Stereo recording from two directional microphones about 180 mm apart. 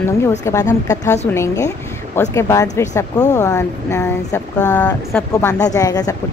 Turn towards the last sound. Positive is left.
turn(degrees=20)  # may be behind; listen again after turning